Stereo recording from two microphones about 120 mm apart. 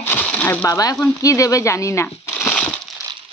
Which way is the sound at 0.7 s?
30° left (ahead or behind).